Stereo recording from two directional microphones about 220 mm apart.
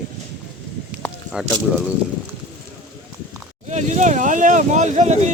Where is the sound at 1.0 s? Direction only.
5° left (ahead or behind).